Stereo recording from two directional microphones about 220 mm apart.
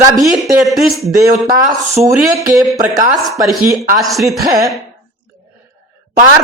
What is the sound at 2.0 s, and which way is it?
Speech, 15° right (ahead or behind).